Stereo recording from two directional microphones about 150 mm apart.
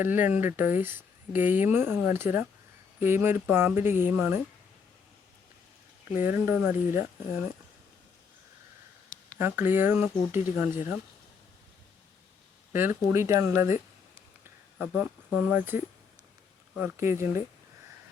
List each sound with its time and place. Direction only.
0.0 s speech: 15° right (ahead or behind)
6.1 s speech: 15° right (ahead or behind)
9.4 s speech: 15° right (ahead or behind)
12.7 s speech: 15° right (ahead or behind)
14.8 s speech: 10° right (ahead or behind)